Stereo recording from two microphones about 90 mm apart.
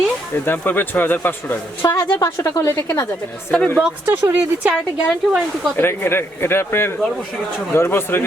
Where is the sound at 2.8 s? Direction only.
25° left (ahead or behind).